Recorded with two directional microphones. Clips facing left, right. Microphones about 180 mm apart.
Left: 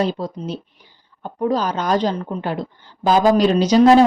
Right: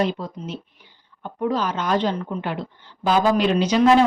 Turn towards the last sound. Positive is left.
turn(degrees=35)  # may be behind; listen again after turning